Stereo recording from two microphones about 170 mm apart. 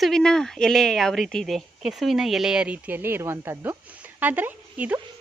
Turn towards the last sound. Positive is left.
turn(degrees=-10)  # may be behind; listen again after turning